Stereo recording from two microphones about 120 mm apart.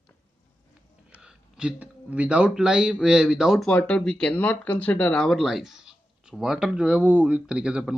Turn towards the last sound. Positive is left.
turn(degrees=-10)  # may be behind; listen again after turning